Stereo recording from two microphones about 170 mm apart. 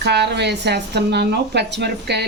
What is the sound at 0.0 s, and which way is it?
Speech, 80° right.